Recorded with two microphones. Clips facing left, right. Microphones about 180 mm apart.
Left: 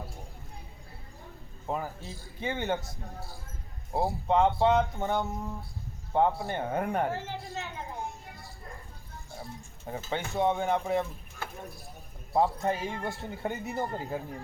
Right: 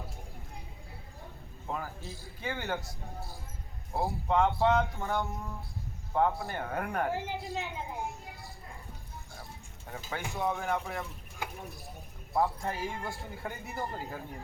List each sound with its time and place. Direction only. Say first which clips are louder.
1.6 s speech: left 4 dB; 20° left (ahead or behind)
3.9 s speech: left 3 dB; 20° left (ahead or behind)
7.1 s a woman's voice: right 1 dB; 15° right (ahead or behind)
9.9 s speech: left 5 dB; 25° left (ahead or behind)
11.4 s speech: right 1 dB; 15° right (ahead or behind)
12.3 s speech: left 4 dB; 25° left (ahead or behind)